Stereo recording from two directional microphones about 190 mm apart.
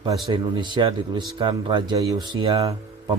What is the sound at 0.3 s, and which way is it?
Speech, 25° right (ahead or behind).